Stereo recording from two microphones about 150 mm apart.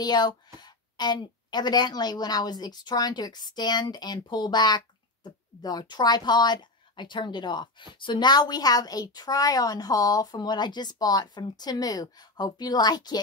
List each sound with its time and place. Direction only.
0.0 s a woman's voice: 30° left (ahead or behind)